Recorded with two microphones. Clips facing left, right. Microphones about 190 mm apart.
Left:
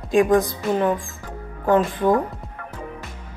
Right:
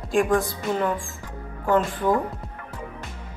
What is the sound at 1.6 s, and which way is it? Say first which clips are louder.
Speech: left 3 dB; 15° left (ahead or behind).